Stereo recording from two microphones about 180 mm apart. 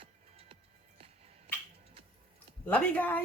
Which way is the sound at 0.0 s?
30° right (ahead or behind).